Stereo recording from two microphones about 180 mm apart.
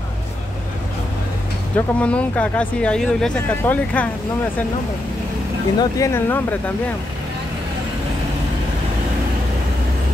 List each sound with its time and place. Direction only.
1.8 s speech: 5° left (ahead or behind)
5.8 s speech: 15° left (ahead or behind)